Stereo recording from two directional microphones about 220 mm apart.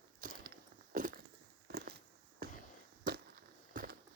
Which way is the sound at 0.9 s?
35° right (ahead or behind).